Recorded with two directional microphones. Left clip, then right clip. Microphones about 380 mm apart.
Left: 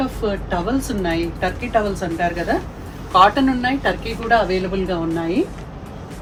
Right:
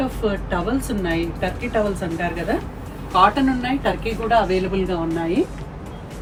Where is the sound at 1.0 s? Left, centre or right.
Centre.